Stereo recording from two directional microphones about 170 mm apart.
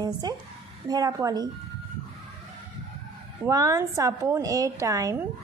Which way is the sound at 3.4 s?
20° right (ahead or behind).